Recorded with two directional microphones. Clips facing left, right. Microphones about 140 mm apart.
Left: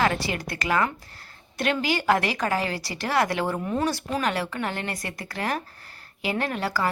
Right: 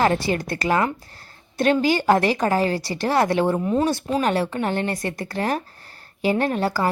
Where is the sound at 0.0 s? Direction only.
35° right (ahead or behind).